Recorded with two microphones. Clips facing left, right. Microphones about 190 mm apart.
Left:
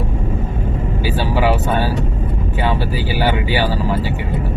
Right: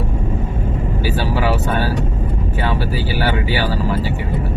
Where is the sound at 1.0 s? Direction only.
15° left (ahead or behind).